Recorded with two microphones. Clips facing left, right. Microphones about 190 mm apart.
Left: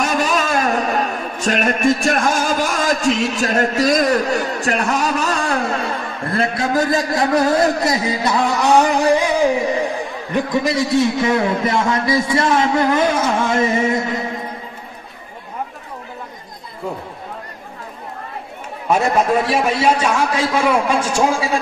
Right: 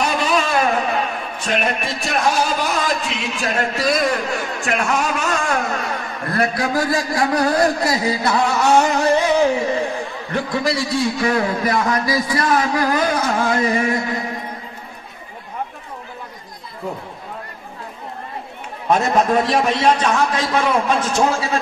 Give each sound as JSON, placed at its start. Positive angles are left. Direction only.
{"t": 0.0, "sound": "a man's voice", "side_deg": 45}
{"t": 18.9, "sound": "a man's voice", "side_deg": 10}